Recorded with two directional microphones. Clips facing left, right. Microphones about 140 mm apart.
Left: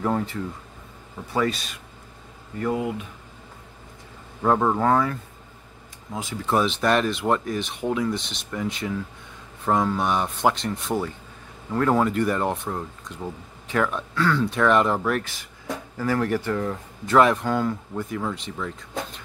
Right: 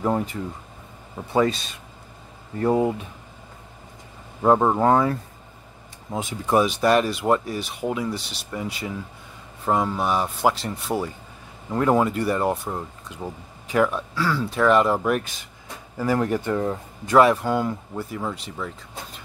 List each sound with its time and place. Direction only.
0.0 s speech: 15° right (ahead or behind); by 3.0 s 30° right (ahead or behind)
4.4 s speech: 20° right (ahead or behind)
6.1 s speech: 15° right (ahead or behind)
15.0 s speech: 15° right (ahead or behind)
17.1 s speech: 10° right (ahead or behind)